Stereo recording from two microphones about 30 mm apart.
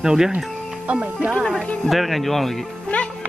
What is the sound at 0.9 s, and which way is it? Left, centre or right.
Speech, right.